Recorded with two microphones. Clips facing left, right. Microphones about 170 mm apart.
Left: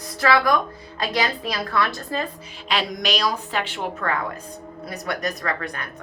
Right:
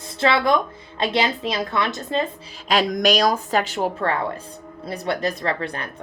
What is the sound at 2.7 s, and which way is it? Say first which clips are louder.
A woman's voice: right 6 dB; 45° right (ahead or behind).